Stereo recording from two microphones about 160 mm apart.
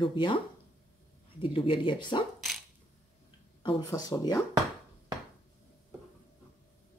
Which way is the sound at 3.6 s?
25° left (ahead or behind).